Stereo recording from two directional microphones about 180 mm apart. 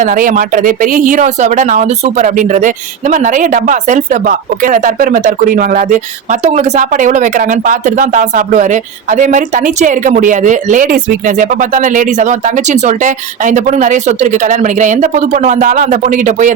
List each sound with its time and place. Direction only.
0.0 s speech: 50° right (ahead or behind)